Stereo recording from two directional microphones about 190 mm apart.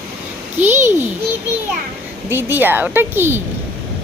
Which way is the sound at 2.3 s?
10° right (ahead or behind).